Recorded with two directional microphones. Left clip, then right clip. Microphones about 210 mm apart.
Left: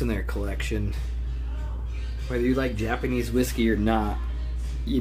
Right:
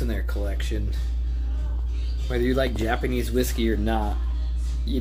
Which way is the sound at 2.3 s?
10° right (ahead or behind).